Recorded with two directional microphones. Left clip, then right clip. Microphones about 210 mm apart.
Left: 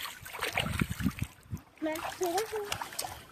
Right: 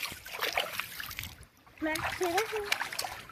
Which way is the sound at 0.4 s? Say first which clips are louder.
Right 1 dB; 20° left (ahead or behind).